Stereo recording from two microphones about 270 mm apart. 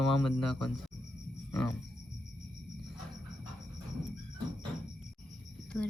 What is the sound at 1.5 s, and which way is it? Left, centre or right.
Music, centre.